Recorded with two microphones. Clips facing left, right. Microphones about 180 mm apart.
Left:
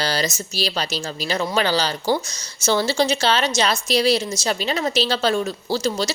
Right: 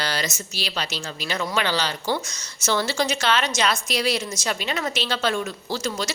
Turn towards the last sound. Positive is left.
turn(degrees=30)  # may be behind; listen again after turning